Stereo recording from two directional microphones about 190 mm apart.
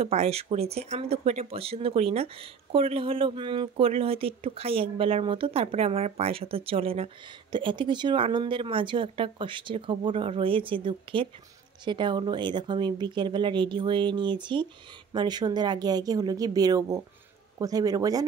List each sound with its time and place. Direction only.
0.0 s speech: 35° right (ahead or behind)